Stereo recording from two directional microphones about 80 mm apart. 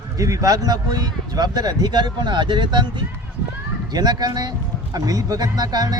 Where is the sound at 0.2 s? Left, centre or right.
Right.